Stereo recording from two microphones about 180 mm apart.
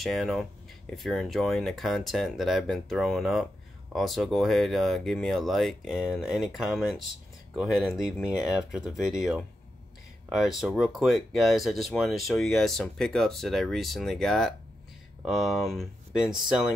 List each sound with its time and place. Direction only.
0.0 s speech: centre (ahead or behind)